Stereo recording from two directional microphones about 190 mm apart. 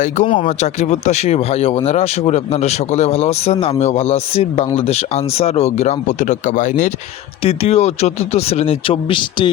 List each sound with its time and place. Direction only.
0.0 s speech: 35° left (ahead or behind)